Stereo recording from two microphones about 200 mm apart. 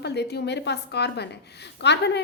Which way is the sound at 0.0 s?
55° left (ahead or behind).